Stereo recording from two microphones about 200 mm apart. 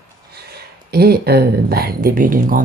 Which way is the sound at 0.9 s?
50° right (ahead or behind).